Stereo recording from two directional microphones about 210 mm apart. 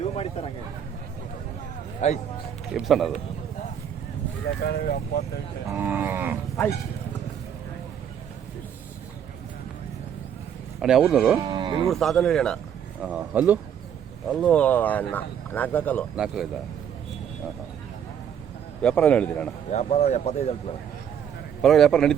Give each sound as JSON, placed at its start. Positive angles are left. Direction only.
{"t": 0.0, "sound": "a sound", "side_deg": 30}
{"t": 2.0, "sound": "speech", "side_deg": 30}
{"t": 2.7, "sound": "speech", "side_deg": 0}
{"t": 4.6, "sound": "speech", "side_deg": 50}
{"t": 5.6, "sound": "speech", "side_deg": -10}
{"t": 10.8, "sound": "speech", "side_deg": -5}
{"t": 11.3, "sound": "speech", "side_deg": -20}
{"t": 11.9, "sound": "speech", "side_deg": 0}
{"t": 14.3, "sound": "speech", "side_deg": 5}
{"t": 16.1, "sound": "speech", "side_deg": -5}
{"t": 18.8, "sound": "speech", "side_deg": 5}
{"t": 19.7, "sound": "speech", "side_deg": 30}
{"t": 21.6, "sound": "speech", "side_deg": 0}